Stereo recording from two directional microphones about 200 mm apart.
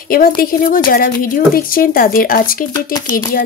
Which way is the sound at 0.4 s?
45° left (ahead or behind).